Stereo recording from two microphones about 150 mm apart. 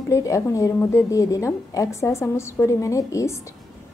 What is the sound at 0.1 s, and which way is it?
A woman's voice, 20° left (ahead or behind).